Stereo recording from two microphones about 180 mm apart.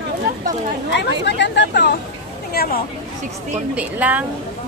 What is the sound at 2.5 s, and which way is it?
Speech, 60° left (ahead or behind).